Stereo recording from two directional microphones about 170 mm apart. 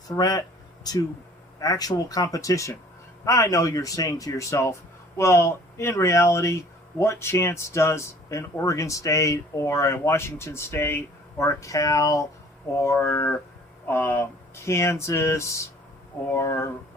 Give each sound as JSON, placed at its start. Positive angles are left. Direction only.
{"t": 0.1, "sound": "speech", "side_deg": 20}